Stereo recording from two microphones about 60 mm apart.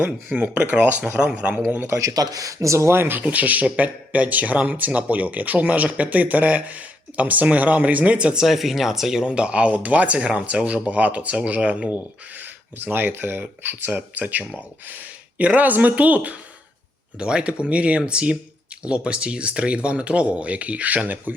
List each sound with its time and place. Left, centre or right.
0.3 s speech: right
2.0 s speech: right
3.2 s speech: right
8.4 s speech: centre; by 11.9 s right
12.4 s speech: right